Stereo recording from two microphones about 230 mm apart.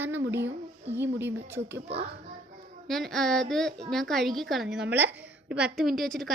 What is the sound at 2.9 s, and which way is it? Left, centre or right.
A woman's voice, centre.